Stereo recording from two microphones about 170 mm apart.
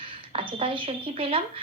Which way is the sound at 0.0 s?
30° right (ahead or behind).